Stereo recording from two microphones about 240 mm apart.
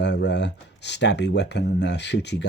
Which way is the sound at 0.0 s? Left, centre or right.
Left.